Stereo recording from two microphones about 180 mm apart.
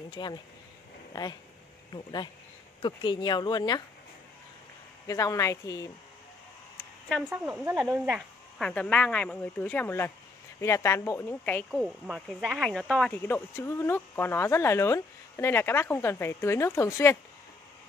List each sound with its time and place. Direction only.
0.1 s speech: 25° left (ahead or behind)
5.0 s speech: 20° left (ahead or behind)
7.2 s speech: 10° right (ahead or behind)
8.6 s speech: 5° left (ahead or behind)
11.7 s speech: 5° right (ahead or behind); by 17.2 s 15° left (ahead or behind)